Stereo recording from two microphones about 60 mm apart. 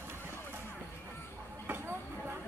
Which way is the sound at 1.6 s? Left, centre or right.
Right.